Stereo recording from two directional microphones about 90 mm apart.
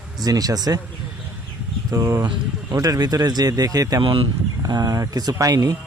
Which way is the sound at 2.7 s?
45° right (ahead or behind).